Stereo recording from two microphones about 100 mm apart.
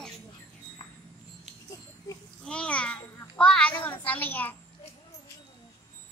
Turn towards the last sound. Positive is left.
turn(degrees=20)  # may be behind; listen again after turning